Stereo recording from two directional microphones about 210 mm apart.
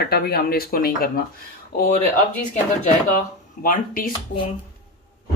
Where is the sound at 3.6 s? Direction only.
45° left (ahead or behind).